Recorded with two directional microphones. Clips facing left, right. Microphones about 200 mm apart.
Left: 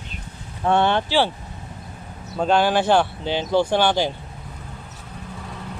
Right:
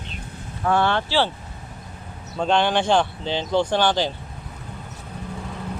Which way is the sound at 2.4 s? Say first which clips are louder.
Left 2 dB; 5° left (ahead or behind).